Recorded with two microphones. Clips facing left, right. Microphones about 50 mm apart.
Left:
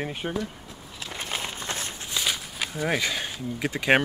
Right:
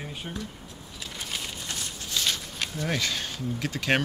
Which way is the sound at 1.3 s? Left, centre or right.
Left.